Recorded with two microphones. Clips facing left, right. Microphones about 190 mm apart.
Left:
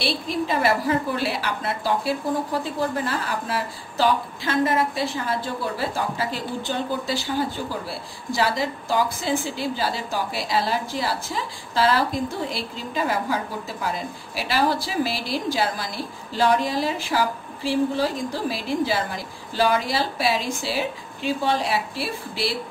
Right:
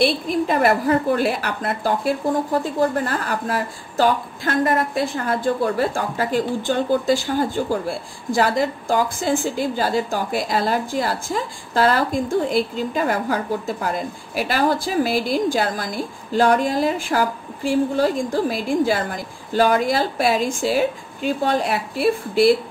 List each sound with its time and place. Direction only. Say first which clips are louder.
0.0 s a woman's voice: right 6 dB; 50° right (ahead or behind)